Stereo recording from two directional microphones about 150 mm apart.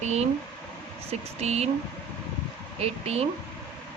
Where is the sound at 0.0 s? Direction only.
45° right (ahead or behind).